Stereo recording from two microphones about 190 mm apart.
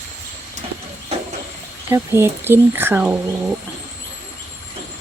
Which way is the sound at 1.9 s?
10° right (ahead or behind).